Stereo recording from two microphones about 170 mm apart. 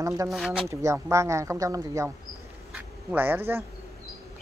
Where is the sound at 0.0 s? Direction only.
20° right (ahead or behind).